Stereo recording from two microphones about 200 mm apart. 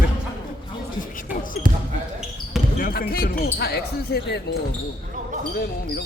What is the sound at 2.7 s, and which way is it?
Speech, 45° left (ahead or behind).